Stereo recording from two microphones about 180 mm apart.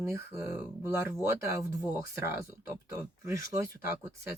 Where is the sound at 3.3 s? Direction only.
15° right (ahead or behind).